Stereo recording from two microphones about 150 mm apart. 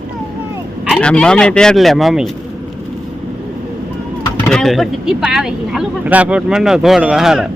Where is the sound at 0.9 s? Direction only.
5° left (ahead or behind).